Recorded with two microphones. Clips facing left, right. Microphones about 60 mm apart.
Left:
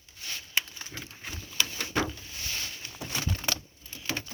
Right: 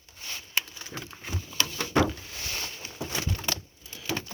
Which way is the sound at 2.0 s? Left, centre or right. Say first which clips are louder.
Right 6 dB; right.